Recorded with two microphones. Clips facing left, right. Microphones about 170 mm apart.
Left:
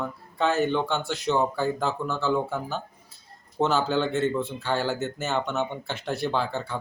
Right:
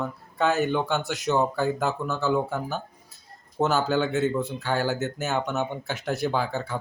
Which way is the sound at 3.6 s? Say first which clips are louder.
Even; centre (ahead or behind).